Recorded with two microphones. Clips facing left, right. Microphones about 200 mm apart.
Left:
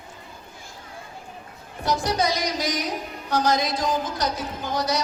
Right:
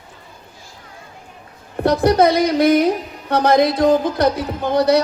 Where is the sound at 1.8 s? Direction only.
60° right (ahead or behind).